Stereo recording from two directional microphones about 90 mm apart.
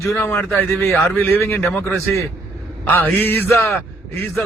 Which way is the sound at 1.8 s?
Centre (ahead or behind).